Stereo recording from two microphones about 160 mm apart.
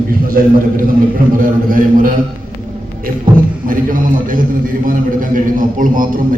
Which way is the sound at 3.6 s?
60° right (ahead or behind).